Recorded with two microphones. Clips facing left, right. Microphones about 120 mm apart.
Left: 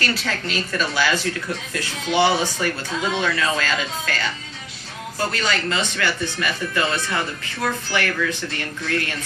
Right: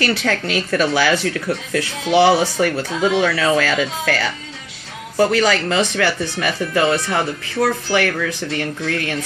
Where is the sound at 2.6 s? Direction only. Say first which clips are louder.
Right 6 dB; 75° right (ahead or behind).